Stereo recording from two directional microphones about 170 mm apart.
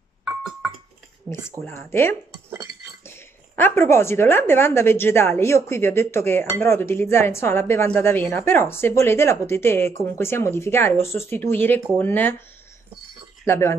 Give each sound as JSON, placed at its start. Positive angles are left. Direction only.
{"t": 0.2, "sound": "a sound", "side_deg": -5}
{"t": 1.6, "sound": "a woman's voice", "side_deg": 15}
{"t": 13.5, "sound": "a woman's voice", "side_deg": 15}